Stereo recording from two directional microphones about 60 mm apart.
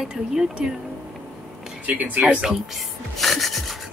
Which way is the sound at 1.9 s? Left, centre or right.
Right.